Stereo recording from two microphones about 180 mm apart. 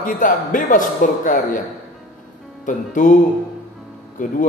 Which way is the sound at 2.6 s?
45° left (ahead or behind).